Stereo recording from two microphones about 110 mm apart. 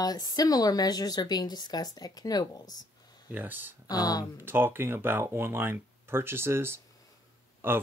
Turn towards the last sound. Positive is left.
turn(degrees=-20)  # may be behind; listen again after turning